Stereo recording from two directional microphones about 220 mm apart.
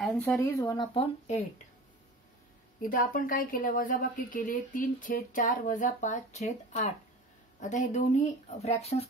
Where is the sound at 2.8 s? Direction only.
40° left (ahead or behind).